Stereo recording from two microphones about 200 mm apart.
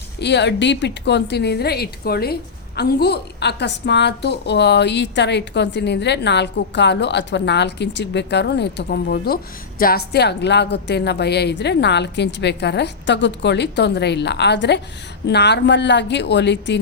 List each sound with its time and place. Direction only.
0.2 s a woman's voice: 60° left (ahead or behind)